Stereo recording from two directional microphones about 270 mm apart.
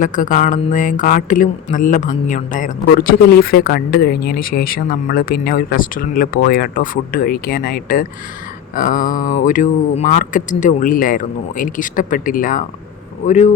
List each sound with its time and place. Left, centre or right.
0.0 s speech: left